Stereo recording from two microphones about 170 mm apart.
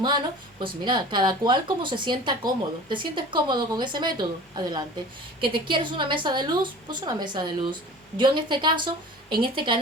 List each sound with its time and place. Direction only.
0.6 s a woman's voice: 25° right (ahead or behind)